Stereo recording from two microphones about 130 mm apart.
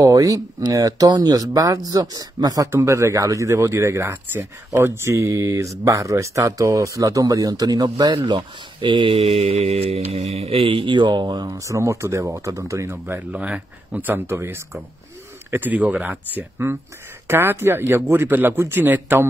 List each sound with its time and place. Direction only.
0.0 s speech: 25° right (ahead or behind)